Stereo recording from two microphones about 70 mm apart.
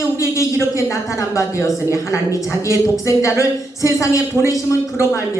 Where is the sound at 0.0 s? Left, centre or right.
Left.